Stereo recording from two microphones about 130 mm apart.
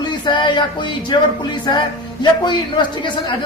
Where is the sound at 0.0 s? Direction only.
35° left (ahead or behind).